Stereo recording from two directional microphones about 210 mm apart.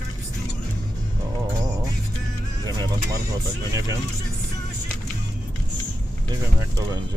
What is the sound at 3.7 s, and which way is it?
Speech, 15° right (ahead or behind).